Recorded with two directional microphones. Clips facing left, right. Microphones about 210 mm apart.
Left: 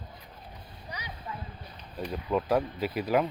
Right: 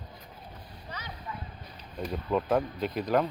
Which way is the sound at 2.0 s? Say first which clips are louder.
Even; centre (ahead or behind).